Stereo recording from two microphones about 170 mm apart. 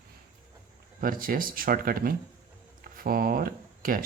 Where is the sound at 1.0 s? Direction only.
55° right (ahead or behind).